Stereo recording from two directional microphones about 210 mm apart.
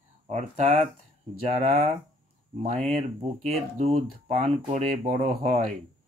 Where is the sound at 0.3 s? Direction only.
35° right (ahead or behind).